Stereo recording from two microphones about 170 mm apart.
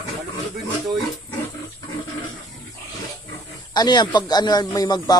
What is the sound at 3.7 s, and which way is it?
A man's voice, 25° left (ahead or behind).